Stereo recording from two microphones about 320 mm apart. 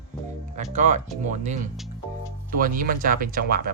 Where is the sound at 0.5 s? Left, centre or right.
Right.